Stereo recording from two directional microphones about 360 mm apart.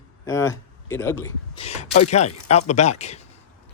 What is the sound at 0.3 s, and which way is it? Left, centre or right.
Speech, centre.